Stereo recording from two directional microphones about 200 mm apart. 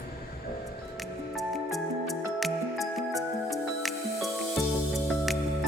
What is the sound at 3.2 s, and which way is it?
Music, centre (ahead or behind).